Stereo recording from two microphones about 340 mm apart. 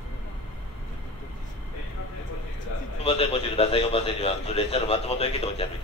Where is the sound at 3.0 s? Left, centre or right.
Centre.